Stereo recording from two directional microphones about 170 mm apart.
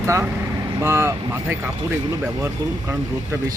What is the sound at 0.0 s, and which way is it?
Speech, 15° right (ahead or behind).